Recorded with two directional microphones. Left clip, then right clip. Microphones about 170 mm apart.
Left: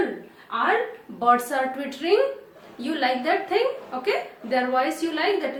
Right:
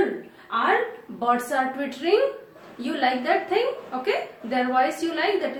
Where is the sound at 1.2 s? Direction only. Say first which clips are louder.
Left 2 dB; 40° left (ahead or behind).